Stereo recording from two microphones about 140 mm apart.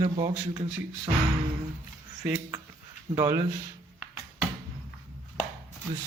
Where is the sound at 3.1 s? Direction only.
25° right (ahead or behind).